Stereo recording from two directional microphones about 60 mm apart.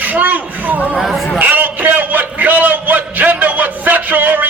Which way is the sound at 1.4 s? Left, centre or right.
Right.